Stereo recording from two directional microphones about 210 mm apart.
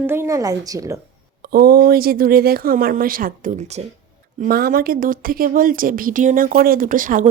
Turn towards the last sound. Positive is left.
turn(degrees=-40)  # may be behind; listen again after turning